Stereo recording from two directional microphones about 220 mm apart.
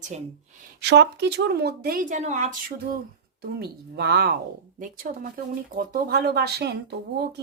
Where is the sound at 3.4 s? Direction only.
45° right (ahead or behind).